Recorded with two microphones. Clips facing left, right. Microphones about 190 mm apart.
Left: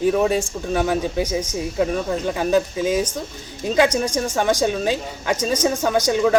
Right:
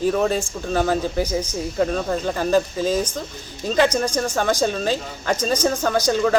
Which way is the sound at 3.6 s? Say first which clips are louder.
Left 1 dB; 10° left (ahead or behind).